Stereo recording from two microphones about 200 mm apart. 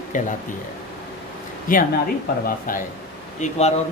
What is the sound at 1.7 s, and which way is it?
Speech, 45° left (ahead or behind).